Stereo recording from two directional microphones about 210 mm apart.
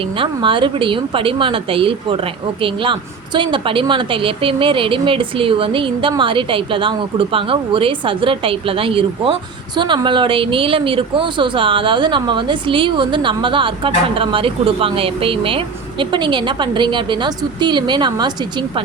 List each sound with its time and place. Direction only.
0.2 s speech: 25° right (ahead or behind)